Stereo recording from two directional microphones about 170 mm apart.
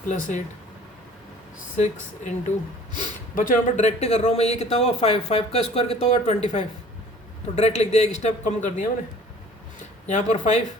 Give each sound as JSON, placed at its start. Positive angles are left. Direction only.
{"t": 0.1, "sound": "speech", "side_deg": 45}
{"t": 1.7, "sound": "speech", "side_deg": 45}
{"t": 3.3, "sound": "speech", "side_deg": 50}
{"t": 10.1, "sound": "speech", "side_deg": 45}